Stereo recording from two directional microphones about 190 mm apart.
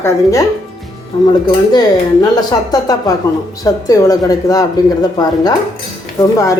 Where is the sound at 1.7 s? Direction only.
20° left (ahead or behind).